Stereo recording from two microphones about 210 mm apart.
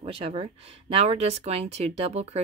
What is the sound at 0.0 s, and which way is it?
Speech, 25° right (ahead or behind).